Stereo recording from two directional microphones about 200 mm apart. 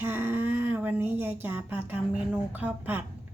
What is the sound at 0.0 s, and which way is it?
Speech, 10° right (ahead or behind).